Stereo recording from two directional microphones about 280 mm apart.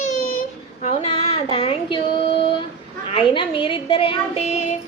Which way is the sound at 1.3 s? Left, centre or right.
Centre.